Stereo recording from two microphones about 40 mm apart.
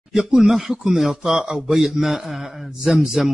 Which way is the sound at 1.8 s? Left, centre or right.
Centre.